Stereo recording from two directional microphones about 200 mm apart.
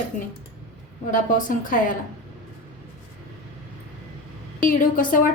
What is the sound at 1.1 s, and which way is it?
Speech, 40° left (ahead or behind).